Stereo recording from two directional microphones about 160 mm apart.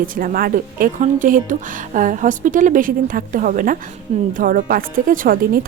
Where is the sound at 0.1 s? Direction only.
65° right (ahead or behind).